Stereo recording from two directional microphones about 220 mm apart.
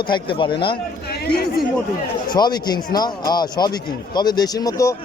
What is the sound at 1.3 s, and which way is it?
Speech, 45° left (ahead or behind).